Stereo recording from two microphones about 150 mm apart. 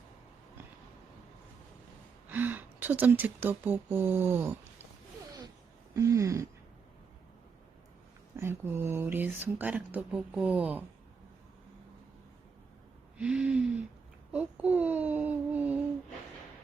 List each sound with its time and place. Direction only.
2.3 s speech: 10° right (ahead or behind)
5.9 s a sound: 20° right (ahead or behind)
8.4 s speech: 15° right (ahead or behind)
13.1 s speech: 5° right (ahead or behind)